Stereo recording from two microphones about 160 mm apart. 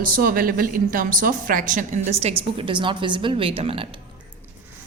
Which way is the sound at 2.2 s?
40° right (ahead or behind).